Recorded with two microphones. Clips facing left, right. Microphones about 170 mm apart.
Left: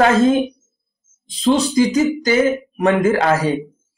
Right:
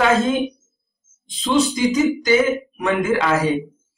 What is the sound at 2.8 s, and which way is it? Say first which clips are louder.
Speech: left 5 dB; 40° left (ahead or behind).